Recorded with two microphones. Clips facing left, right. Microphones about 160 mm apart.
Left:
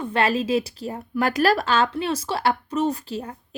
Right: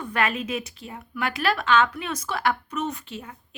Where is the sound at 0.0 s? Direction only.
30° left (ahead or behind).